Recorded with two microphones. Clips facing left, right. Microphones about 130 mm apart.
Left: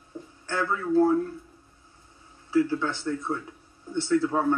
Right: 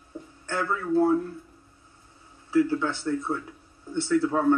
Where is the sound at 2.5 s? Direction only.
15° right (ahead or behind).